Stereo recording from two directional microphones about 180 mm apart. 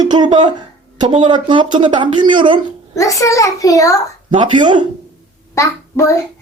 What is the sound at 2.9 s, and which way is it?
A child's voice, 15° left (ahead or behind).